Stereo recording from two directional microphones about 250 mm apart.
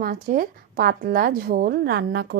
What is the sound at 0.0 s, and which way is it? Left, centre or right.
A woman's voice, right.